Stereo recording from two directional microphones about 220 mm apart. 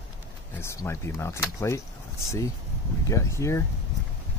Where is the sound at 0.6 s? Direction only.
10° left (ahead or behind).